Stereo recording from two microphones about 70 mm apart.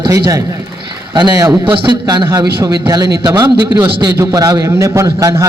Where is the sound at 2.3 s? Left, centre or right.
Right.